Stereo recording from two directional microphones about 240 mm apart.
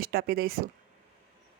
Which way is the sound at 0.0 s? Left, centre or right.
Right.